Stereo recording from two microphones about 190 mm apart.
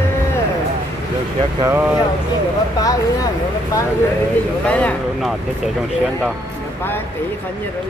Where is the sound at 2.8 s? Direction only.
20° left (ahead or behind).